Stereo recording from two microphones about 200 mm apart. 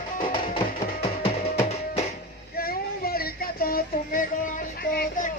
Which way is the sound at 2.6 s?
50° left (ahead or behind).